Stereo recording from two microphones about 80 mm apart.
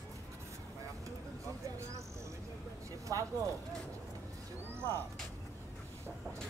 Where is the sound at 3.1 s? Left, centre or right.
Right.